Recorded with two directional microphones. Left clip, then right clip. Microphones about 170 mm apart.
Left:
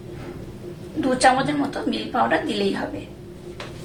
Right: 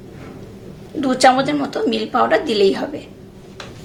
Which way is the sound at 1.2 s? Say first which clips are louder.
Right 5 dB; 65° right (ahead or behind).